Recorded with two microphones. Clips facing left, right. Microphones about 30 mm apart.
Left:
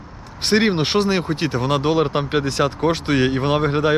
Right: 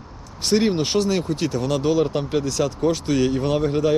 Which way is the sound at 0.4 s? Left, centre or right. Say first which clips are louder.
Left 2 dB; left.